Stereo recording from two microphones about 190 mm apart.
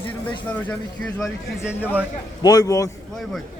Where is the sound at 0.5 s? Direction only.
10° left (ahead or behind).